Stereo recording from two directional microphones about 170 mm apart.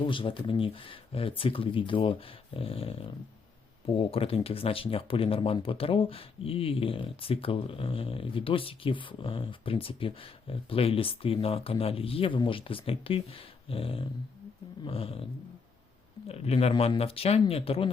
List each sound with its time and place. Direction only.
0.0 s speech: 30° left (ahead or behind)